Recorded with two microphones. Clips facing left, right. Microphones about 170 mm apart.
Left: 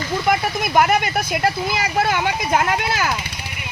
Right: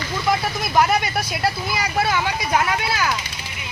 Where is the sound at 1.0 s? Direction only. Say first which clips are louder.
Left 3 dB; 55° left (ahead or behind).